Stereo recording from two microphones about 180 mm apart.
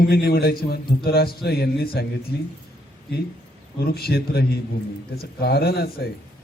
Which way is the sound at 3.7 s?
60° left (ahead or behind).